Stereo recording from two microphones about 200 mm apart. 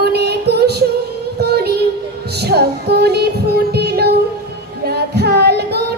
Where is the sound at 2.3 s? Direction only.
55° right (ahead or behind).